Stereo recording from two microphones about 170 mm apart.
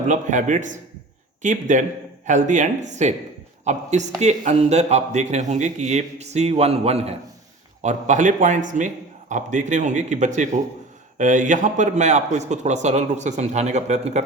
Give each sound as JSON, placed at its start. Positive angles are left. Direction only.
{"t": 0.1, "sound": "a man's voice", "side_deg": -45}